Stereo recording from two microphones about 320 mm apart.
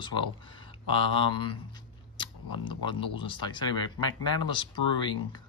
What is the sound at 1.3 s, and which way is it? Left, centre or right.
Speech, centre.